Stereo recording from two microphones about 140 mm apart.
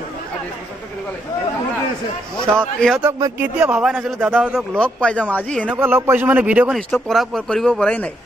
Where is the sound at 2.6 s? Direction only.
5° left (ahead or behind).